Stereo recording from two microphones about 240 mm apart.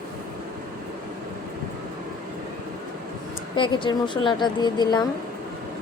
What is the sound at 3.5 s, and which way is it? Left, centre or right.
A woman's voice, centre.